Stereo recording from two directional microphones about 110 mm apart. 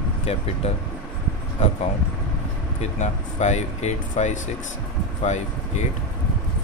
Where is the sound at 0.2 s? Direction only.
70° left (ahead or behind).